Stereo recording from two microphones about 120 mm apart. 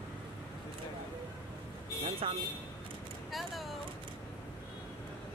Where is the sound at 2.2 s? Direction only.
55° right (ahead or behind).